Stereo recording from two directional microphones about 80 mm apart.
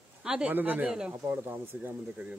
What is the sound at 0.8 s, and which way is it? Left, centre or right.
Speech, centre.